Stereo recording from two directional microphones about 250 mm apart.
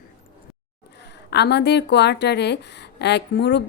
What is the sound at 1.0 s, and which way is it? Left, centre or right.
Speech, left.